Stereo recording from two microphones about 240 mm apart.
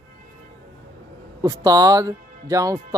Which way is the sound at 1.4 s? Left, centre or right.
Centre.